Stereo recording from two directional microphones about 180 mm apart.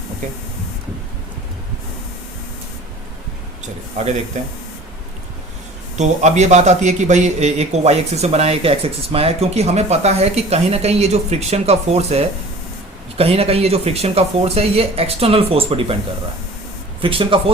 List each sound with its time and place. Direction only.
3.9 s a man's voice: 40° right (ahead or behind)
6.0 s a man's voice: 40° right (ahead or behind)
17.0 s speech: 30° right (ahead or behind)